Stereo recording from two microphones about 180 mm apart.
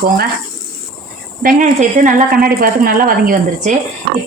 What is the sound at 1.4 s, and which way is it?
Speech, 45° right (ahead or behind).